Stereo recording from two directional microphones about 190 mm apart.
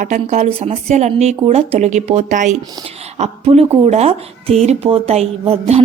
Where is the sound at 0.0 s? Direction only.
40° right (ahead or behind).